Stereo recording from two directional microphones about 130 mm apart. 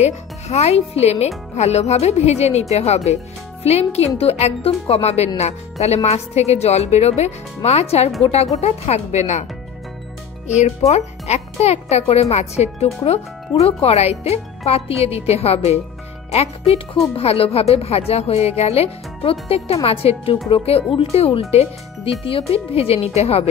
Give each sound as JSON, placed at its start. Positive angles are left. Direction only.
{"t": 0.0, "sound": "speech", "side_deg": 55}
{"t": 10.9, "sound": "speech", "side_deg": 60}